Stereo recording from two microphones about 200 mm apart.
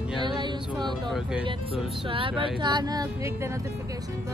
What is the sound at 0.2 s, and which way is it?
Music, 25° right (ahead or behind).